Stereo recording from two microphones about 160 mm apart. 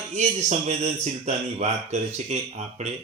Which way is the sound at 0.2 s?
45° right (ahead or behind).